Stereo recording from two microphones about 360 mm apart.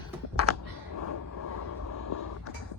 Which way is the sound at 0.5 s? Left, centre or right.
Left.